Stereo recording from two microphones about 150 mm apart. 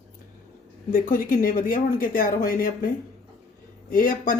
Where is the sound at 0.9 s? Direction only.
70° left (ahead or behind).